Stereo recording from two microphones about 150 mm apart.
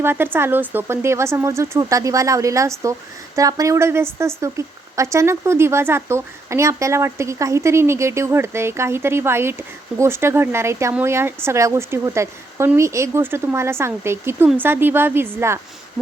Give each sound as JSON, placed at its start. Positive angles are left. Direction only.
{"t": 0.0, "sound": "speech", "side_deg": -15}